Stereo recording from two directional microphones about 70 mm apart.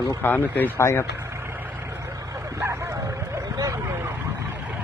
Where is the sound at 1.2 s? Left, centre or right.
Right.